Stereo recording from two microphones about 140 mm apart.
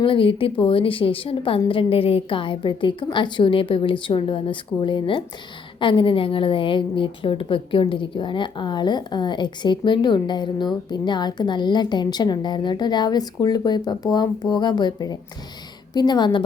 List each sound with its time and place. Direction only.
0.0 s a woman's voice: 40° left (ahead or behind)